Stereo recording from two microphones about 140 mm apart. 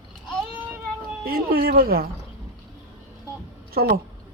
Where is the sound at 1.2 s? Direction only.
90° right.